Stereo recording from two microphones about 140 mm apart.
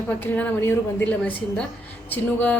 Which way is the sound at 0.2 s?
15° left (ahead or behind).